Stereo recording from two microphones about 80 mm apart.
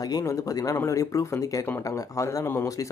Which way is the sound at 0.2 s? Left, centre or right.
Left.